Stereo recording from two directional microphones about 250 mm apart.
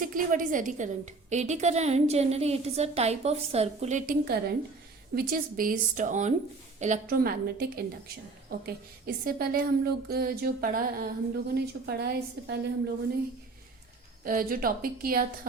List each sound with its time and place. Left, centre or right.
0.0 s a woman's voice: right
14.3 s a woman's voice: right